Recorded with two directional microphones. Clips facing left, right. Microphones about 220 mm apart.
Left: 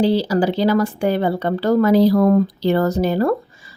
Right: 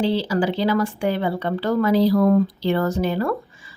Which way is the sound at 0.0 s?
40° left (ahead or behind).